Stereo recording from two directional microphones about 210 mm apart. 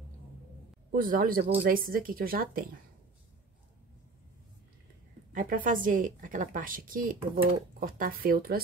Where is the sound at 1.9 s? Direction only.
40° right (ahead or behind).